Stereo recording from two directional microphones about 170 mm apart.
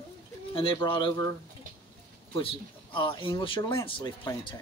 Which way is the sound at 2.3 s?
30° left (ahead or behind).